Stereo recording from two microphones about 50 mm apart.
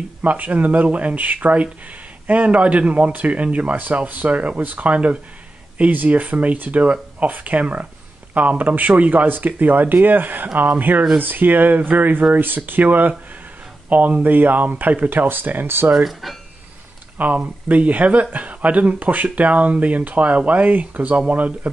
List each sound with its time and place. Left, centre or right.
0.2 s speech: right
16.0 s speech: centre
17.2 s speech: right